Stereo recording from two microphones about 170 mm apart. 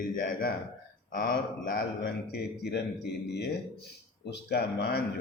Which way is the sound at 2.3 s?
70° left (ahead or behind).